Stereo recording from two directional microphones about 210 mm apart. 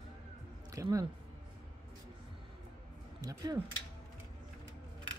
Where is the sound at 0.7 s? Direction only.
15° right (ahead or behind).